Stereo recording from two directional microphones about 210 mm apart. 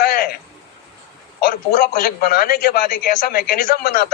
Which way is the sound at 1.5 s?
45° left (ahead or behind).